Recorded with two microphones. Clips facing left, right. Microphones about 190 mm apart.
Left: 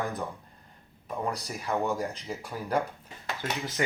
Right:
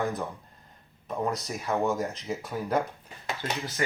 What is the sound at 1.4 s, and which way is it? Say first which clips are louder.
Speech: right 2 dB; 10° left (ahead or behind).